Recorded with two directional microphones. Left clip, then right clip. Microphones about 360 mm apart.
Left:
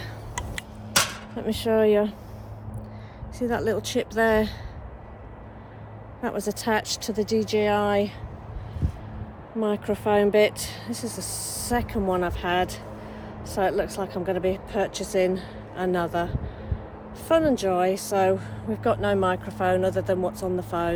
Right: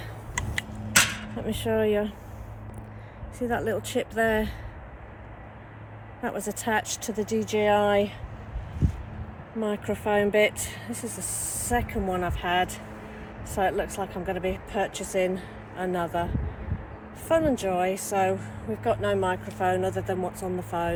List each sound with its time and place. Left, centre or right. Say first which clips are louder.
1.4 s speech: left 4 dB; centre
3.3 s speech: left 2 dB; centre
6.2 s speech: left 3 dB; centre
9.6 s speech: left 3 dB; centre